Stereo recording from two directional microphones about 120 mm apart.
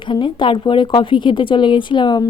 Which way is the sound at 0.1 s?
40° left (ahead or behind).